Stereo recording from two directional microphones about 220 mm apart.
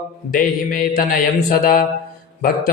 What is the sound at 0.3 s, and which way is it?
A man's voice, 40° left (ahead or behind).